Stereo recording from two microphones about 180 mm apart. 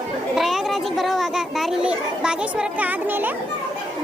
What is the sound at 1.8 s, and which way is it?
Speech, 5° right (ahead or behind).